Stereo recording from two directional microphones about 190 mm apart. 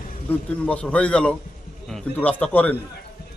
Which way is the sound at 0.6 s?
5° left (ahead or behind).